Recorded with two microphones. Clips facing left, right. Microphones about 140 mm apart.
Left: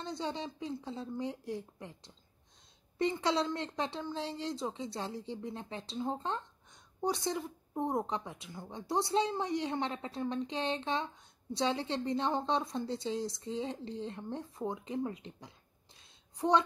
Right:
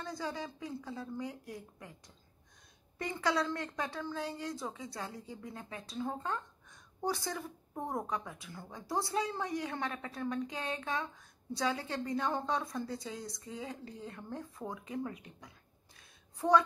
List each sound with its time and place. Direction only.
0.0 s a woman's voice: 25° left (ahead or behind)